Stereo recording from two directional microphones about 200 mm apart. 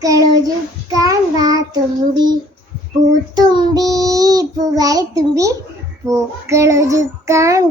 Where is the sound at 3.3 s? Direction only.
20° right (ahead or behind).